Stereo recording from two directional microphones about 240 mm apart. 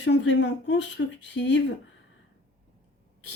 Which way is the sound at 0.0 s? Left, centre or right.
Left.